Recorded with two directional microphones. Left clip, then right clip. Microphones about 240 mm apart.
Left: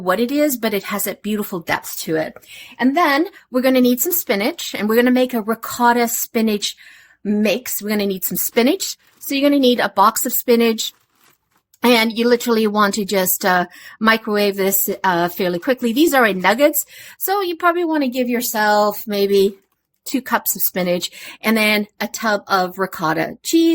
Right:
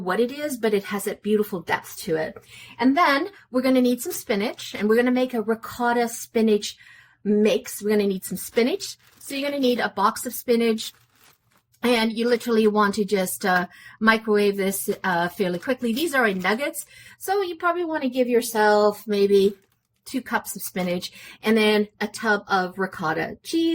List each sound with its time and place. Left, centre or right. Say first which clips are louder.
0.0 s speech: left 7 dB; left
11.8 s speech: left 7 dB; left